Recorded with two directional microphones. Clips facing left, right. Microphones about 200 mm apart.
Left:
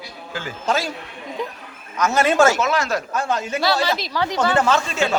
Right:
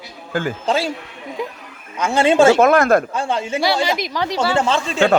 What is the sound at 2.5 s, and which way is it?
Speech, 55° right (ahead or behind).